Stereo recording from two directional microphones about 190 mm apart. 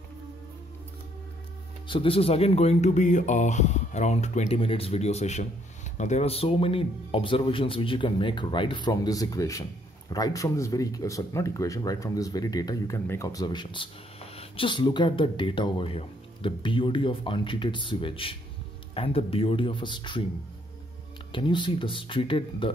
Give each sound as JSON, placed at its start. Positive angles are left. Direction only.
{"t": 1.9, "sound": "speech", "side_deg": 30}
{"t": 21.3, "sound": "speech", "side_deg": 25}